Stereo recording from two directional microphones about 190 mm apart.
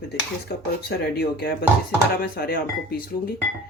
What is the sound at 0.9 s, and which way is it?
Speech, 55° left (ahead or behind).